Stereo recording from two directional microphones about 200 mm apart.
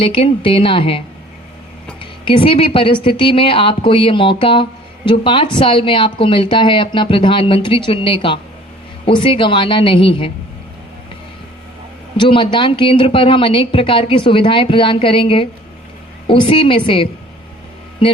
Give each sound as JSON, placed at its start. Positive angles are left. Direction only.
{"t": 0.0, "sound": "a woman's voice", "side_deg": 25}
{"t": 2.2, "sound": "a woman's voice", "side_deg": 25}
{"t": 12.1, "sound": "a woman's voice", "side_deg": 25}